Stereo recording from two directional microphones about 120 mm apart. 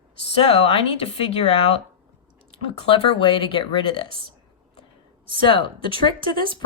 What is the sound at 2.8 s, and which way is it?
Speech, 50° left (ahead or behind).